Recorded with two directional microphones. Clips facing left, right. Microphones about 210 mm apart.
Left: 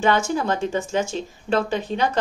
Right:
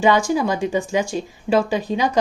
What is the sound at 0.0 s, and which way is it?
Speech, 15° right (ahead or behind).